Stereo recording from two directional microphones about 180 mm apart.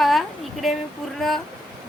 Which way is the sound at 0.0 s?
Centre (ahead or behind).